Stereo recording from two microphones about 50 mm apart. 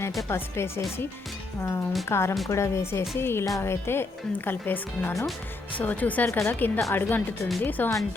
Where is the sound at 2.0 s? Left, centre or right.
Left.